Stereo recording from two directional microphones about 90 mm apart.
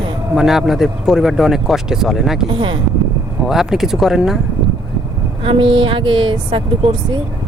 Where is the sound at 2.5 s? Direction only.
70° right (ahead or behind).